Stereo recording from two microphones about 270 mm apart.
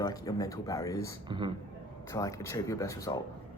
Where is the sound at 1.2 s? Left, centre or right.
Centre.